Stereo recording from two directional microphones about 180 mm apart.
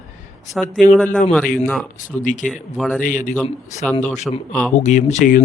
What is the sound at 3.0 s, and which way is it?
Speech, 45° left (ahead or behind).